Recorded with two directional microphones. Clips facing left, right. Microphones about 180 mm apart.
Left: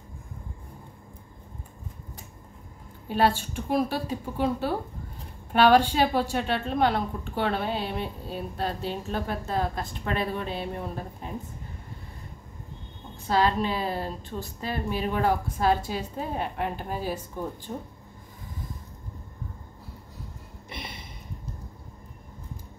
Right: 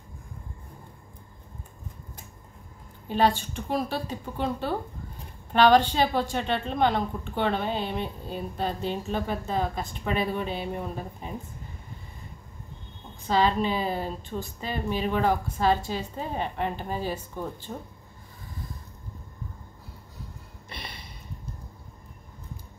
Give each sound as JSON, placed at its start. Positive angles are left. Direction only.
{"t": 3.1, "sound": "a woman's voice", "side_deg": 5}
{"t": 13.3, "sound": "a woman's voice", "side_deg": 0}
{"t": 20.7, "sound": "a sound", "side_deg": 20}